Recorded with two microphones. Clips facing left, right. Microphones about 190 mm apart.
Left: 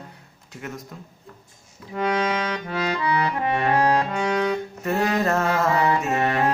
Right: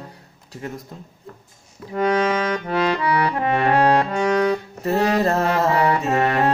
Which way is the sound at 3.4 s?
65° right (ahead or behind).